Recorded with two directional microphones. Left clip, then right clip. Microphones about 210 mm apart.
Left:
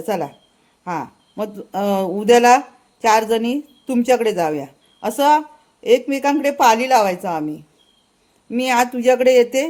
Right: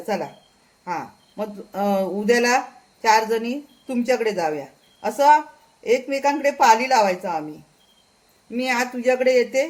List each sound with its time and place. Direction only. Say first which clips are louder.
0.0 s a woman's voice: left 3 dB; 50° left (ahead or behind)
8.4 s speech: left 6 dB; 50° left (ahead or behind)